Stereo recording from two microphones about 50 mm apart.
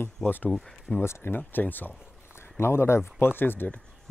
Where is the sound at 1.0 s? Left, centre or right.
Left.